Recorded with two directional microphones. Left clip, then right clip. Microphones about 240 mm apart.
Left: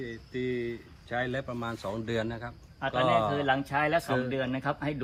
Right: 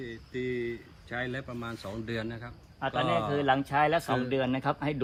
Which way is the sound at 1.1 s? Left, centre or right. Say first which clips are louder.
Left 3 dB; centre.